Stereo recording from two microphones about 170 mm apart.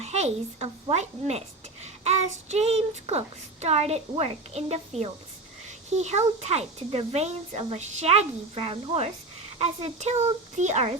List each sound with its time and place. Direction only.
0.0 s a woman's voice: 40° right (ahead or behind)